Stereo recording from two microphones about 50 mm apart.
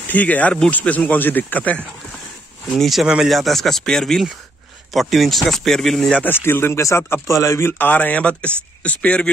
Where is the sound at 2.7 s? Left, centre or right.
Centre.